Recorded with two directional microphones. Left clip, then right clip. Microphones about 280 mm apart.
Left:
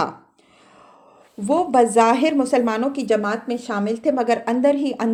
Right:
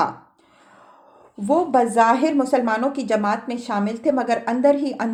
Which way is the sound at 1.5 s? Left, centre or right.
Left.